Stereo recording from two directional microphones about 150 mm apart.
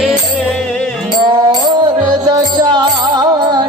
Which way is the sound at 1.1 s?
25° right (ahead or behind).